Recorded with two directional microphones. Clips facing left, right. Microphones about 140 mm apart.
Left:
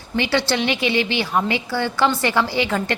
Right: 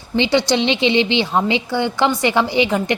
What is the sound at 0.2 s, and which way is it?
A woman's voice, 15° right (ahead or behind).